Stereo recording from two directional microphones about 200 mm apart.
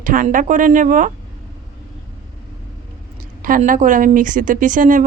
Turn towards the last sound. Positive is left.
turn(degrees=-40)  # may be behind; listen again after turning